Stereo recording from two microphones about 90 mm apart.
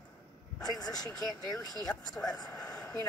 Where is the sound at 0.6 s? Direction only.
45° left (ahead or behind).